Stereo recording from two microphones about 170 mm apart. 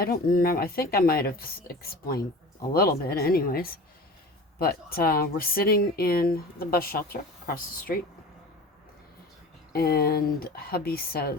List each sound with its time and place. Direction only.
0.0 s speech: 60° left (ahead or behind)
9.7 s speech: 65° left (ahead or behind)